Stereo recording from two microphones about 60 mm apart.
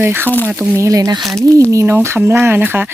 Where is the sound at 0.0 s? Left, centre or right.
Right.